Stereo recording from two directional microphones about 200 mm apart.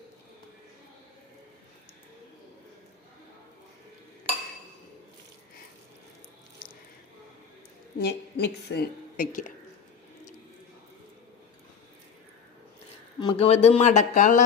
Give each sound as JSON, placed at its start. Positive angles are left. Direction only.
{"t": 7.9, "sound": "a woman's voice", "side_deg": 55}
{"t": 13.1, "sound": "speech", "side_deg": 25}